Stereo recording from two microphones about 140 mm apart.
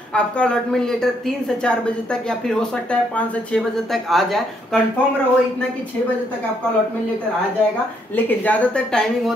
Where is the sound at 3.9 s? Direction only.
Centre (ahead or behind).